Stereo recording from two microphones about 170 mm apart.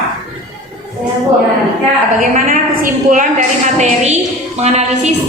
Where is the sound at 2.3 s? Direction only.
50° right (ahead or behind).